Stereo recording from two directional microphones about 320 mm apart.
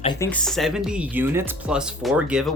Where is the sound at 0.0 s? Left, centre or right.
Centre.